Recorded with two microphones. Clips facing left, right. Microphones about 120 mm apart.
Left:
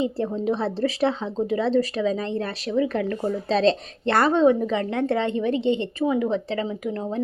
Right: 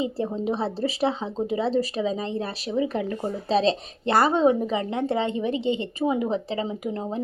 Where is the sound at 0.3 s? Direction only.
10° right (ahead or behind).